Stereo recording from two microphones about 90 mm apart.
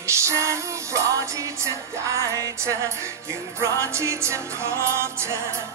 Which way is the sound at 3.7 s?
30° right (ahead or behind).